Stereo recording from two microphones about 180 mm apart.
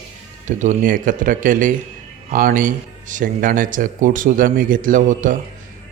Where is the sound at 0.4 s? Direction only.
45° right (ahead or behind).